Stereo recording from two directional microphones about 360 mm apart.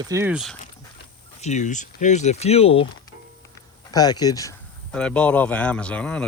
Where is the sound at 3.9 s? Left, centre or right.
Centre.